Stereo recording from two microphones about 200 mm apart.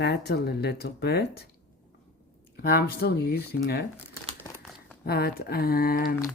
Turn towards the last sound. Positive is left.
turn(degrees=50)  # may be behind; listen again after turning